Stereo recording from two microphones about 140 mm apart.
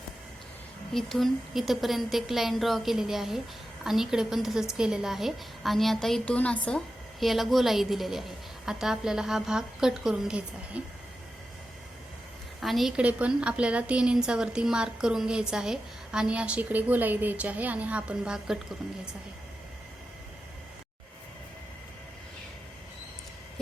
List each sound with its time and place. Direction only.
0.9 s a woman's voice: centre (ahead or behind)
12.5 s a woman's voice: centre (ahead or behind)